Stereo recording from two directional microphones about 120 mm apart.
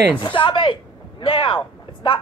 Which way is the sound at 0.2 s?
45° left (ahead or behind).